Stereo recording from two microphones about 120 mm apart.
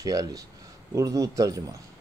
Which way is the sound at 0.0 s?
30° right (ahead or behind).